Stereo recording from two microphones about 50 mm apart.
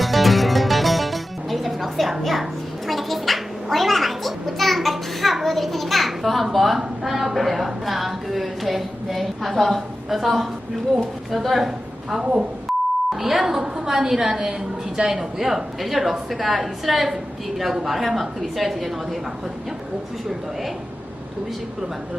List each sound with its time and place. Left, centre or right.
0.0 s music: centre
6.7 s a woman's voice: centre
12.2 s speech: centre
12.7 s beep: centre
13.1 s a woman's voice: centre